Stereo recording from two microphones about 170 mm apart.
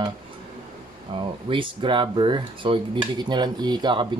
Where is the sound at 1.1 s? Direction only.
30° right (ahead or behind).